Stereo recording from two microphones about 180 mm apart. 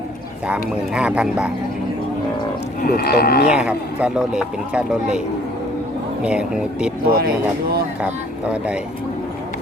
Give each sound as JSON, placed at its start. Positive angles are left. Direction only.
{"t": 0.4, "sound": "speech", "side_deg": -5}
{"t": 2.8, "sound": "speech", "side_deg": 60}
{"t": 3.5, "sound": "speech", "side_deg": -5}
{"t": 6.2, "sound": "speech", "side_deg": -5}
{"t": 7.1, "sound": "speech", "side_deg": -55}
{"t": 8.0, "sound": "speech", "side_deg": -5}